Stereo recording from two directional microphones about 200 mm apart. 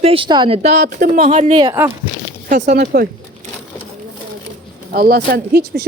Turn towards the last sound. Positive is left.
turn(degrees=-50)  # may be behind; listen again after turning